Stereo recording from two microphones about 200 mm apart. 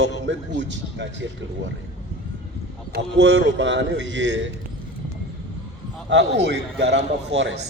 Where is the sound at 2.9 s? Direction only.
65° right (ahead or behind).